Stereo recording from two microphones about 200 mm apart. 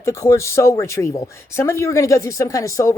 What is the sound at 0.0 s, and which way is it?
Speech, 15° left (ahead or behind).